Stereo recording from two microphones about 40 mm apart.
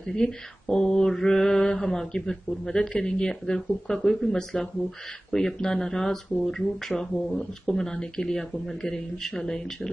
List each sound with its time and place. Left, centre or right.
0.0 s speech: centre